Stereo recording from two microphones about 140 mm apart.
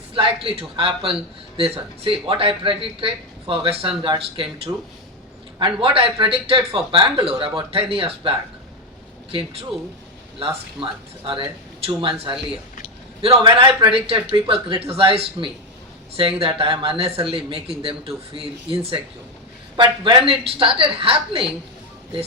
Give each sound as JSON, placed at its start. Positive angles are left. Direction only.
{"t": 0.1, "sound": "speech", "side_deg": -40}
{"t": 4.7, "sound": "speech", "side_deg": -20}
{"t": 5.5, "sound": "speech", "side_deg": -40}
{"t": 11.9, "sound": "a man's voice", "side_deg": -40}